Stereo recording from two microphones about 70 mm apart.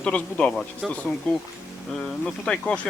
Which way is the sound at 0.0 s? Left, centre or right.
Centre.